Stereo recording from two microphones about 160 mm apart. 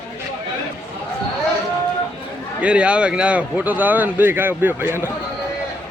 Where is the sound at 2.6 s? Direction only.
5° right (ahead or behind).